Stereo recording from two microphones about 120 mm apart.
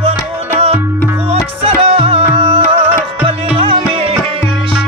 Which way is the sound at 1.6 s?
50° right (ahead or behind).